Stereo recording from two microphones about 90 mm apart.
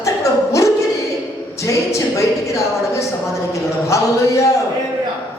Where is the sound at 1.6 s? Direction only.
35° left (ahead or behind).